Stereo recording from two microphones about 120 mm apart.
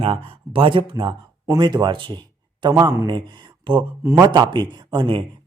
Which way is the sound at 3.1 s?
40° right (ahead or behind).